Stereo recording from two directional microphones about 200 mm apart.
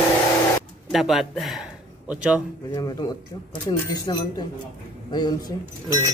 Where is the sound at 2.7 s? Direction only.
20° left (ahead or behind).